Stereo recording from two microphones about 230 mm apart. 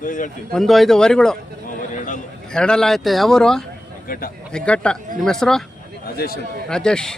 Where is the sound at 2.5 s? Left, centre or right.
Centre.